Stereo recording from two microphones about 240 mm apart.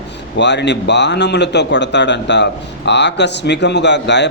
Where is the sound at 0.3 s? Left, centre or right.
Left.